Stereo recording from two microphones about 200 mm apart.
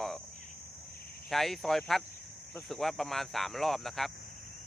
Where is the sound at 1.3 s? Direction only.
Centre (ahead or behind).